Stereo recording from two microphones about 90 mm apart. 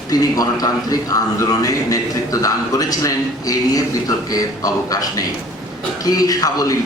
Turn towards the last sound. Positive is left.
turn(degrees=40)  # may be behind; listen again after turning